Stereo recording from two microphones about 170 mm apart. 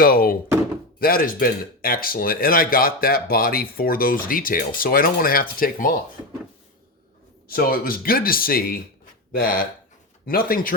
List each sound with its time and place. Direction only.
0.0 s thunk: 60° left (ahead or behind)
0.9 s speech: 60° left (ahead or behind)
7.4 s speech: 60° left (ahead or behind)